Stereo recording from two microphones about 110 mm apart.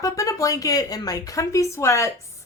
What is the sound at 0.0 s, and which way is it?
A woman's voice, 30° left (ahead or behind).